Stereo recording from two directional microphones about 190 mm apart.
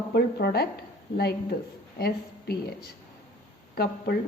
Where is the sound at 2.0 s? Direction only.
55° left (ahead or behind).